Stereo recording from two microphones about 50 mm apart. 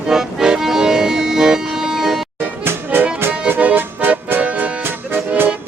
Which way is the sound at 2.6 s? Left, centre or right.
Right.